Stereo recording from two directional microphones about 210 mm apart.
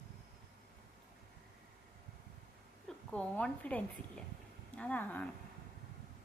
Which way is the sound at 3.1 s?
5° left (ahead or behind).